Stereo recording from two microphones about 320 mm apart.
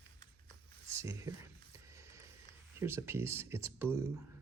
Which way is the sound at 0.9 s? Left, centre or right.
Centre.